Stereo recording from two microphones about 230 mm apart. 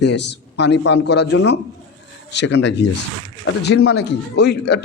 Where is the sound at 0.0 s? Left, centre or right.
Left.